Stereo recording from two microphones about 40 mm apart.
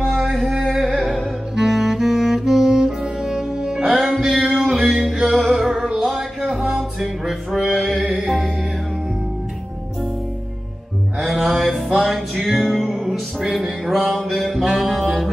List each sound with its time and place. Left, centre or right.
0.7 s music: centre
1.5 s saxophone: centre
4.3 s music: centre
11.1 s music: centre